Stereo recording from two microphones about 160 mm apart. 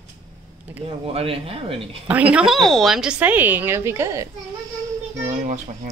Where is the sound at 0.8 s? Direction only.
35° right (ahead or behind).